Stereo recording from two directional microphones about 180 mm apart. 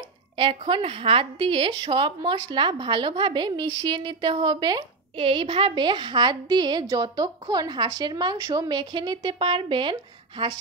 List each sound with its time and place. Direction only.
0.4 s a woman's voice: 30° right (ahead or behind)